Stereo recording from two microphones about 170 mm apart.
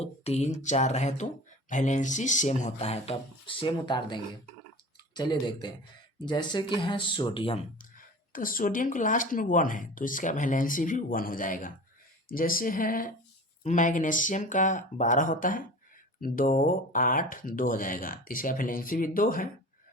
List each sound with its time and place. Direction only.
0.0 s speech: 40° left (ahead or behind)
8.3 s speech: 55° left (ahead or behind)